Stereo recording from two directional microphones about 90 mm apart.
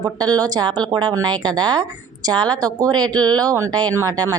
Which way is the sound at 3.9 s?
40° right (ahead or behind).